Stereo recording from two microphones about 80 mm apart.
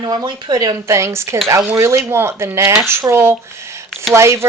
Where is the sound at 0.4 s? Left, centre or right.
Right.